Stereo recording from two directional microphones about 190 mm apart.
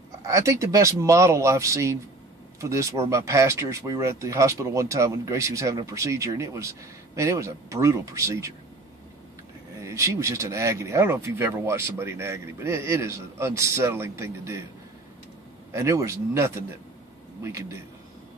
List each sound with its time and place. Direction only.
0.3 s speech: 15° right (ahead or behind)
9.8 s speech: 15° right (ahead or behind)
15.7 s a man's voice: 15° right (ahead or behind)